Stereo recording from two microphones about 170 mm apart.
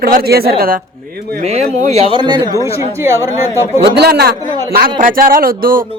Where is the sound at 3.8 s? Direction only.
70° right (ahead or behind).